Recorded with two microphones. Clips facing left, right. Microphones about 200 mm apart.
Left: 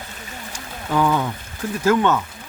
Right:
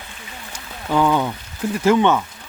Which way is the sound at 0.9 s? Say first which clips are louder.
Right 2 dB; 10° right (ahead or behind).